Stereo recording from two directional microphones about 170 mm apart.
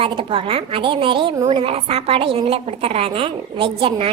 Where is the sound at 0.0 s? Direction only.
30° right (ahead or behind).